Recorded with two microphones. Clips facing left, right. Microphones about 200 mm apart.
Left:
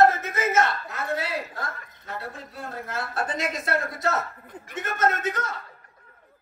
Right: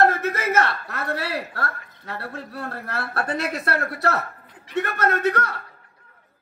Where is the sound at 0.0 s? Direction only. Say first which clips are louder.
Even; 65° right (ahead or behind).